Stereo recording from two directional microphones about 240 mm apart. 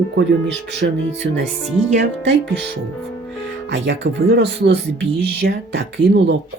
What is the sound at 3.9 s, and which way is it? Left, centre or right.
Speech, right.